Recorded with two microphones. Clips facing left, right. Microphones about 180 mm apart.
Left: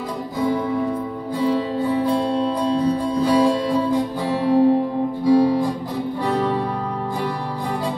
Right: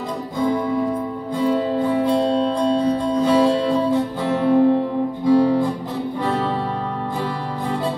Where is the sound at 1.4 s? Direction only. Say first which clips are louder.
Right 2 dB; 10° left (ahead or behind).